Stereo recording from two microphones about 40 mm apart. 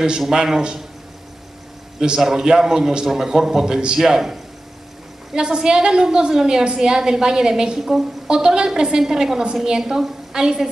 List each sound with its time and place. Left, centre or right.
0.2 s a woman's voice: centre
2.0 s a woman's voice: centre